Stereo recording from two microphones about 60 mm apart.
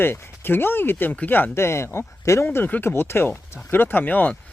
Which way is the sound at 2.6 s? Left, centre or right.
Left.